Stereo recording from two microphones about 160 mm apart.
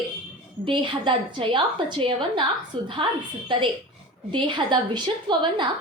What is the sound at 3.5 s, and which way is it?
A woman's voice, 30° right (ahead or behind).